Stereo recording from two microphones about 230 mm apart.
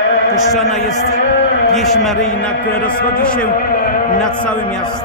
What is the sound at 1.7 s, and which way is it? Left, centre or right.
A man's voice, centre.